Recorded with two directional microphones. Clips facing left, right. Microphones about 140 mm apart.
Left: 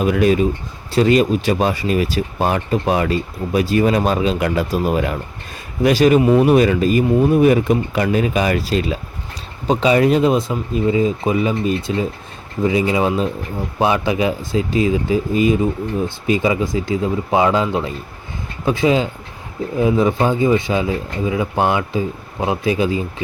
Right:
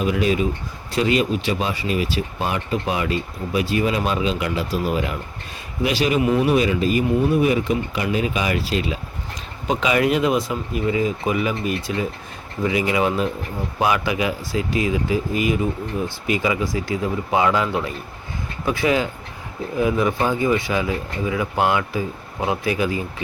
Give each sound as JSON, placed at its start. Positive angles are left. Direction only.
{"t": 0.0, "sound": "speech", "side_deg": 50}
{"t": 6.2, "sound": "speech", "side_deg": 30}
{"t": 6.5, "sound": "speech", "side_deg": 45}